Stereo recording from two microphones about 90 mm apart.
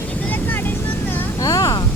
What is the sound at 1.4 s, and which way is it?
Speech, 40° left (ahead or behind).